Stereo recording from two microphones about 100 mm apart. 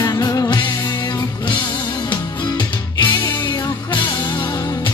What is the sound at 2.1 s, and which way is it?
Music, 50° left (ahead or behind).